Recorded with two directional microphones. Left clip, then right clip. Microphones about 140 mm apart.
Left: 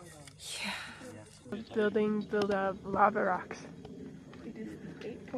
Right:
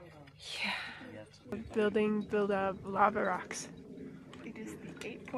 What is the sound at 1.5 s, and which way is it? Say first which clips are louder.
Speech: left 1 dB; 20° right (ahead or behind).